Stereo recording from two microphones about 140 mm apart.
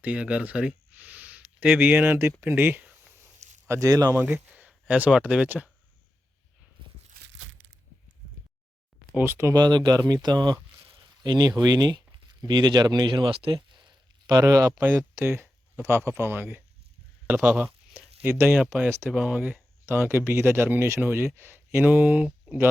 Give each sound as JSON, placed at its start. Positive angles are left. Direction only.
{"t": 0.0, "sound": "speech", "side_deg": -10}
{"t": 2.4, "sound": "a sound", "side_deg": -15}
{"t": 3.7, "sound": "speech", "side_deg": -25}
{"t": 4.2, "sound": "speech", "side_deg": -10}
{"t": 9.1, "sound": "speech", "side_deg": -15}